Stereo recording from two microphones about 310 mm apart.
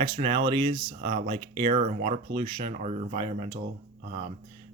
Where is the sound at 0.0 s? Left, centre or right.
Centre.